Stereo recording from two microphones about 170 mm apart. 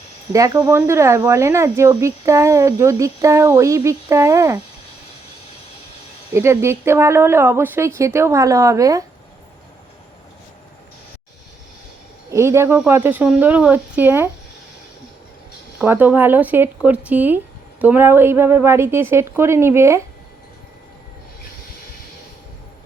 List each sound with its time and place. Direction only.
0.3 s speech: 20° right (ahead or behind)
6.3 s speech: 15° right (ahead or behind)
12.3 s speech: 15° right (ahead or behind)
15.8 s speech: 10° right (ahead or behind)